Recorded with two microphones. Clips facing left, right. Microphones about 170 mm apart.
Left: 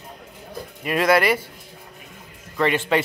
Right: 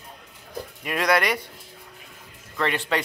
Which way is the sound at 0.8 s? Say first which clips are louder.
Left 4 dB; centre (ahead or behind).